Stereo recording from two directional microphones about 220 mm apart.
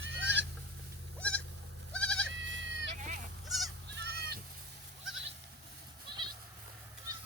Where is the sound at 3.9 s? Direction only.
50° right (ahead or behind).